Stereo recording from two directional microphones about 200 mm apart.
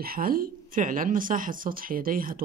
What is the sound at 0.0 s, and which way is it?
A woman's voice, 45° right (ahead or behind).